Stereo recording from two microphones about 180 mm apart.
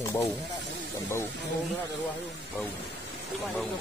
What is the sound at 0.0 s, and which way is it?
Snake, 15° left (ahead or behind).